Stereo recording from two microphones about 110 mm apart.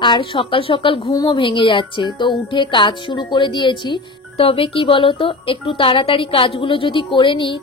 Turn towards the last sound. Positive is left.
turn(degrees=50)  # may be behind; listen again after turning